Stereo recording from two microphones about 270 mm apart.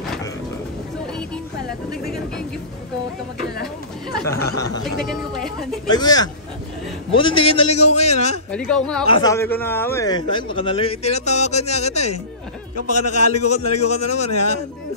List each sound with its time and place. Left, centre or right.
1.9 s speech: centre
4.3 s speech: centre
5.0 s speech: centre
5.9 s speech: centre
8.5 s speech: centre
9.0 s speech: centre
12.7 s a man's voice: left
13.7 s speech: left